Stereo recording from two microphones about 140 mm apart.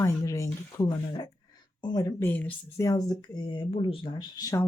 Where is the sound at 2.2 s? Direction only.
15° left (ahead or behind).